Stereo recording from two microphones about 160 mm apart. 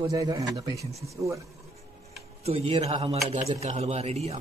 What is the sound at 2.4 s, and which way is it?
Speech, 40° right (ahead or behind).